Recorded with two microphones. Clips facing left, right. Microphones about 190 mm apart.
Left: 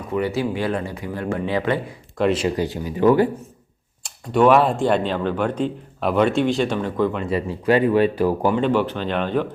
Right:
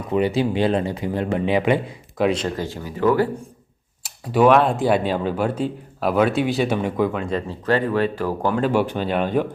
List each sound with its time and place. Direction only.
0.1 s speech: 20° right (ahead or behind)
2.1 s speech: centre (ahead or behind)
2.4 s speech: 15° left (ahead or behind)
4.0 s speech: 5° right (ahead or behind)
7.2 s speech: 10° left (ahead or behind)
8.5 s speech: 5° right (ahead or behind)